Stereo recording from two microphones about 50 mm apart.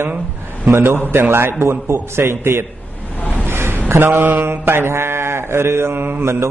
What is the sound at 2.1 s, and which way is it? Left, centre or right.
Speech, right.